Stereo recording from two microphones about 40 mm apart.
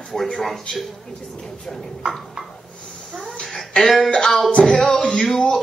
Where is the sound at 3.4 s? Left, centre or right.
Centre.